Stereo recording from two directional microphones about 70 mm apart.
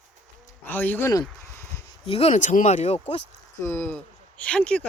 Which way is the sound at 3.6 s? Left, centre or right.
Left.